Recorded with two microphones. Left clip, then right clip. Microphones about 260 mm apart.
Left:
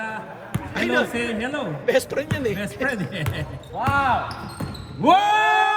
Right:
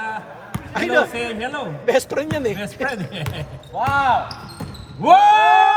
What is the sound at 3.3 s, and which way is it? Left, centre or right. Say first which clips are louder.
Speech: right 3 dB; right.